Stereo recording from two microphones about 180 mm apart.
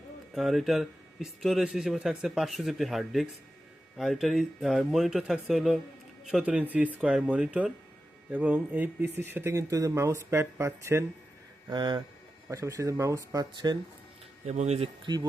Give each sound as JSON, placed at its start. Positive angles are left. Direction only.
{"t": 0.3, "sound": "speech", "side_deg": 0}
{"t": 14.4, "sound": "speech", "side_deg": -40}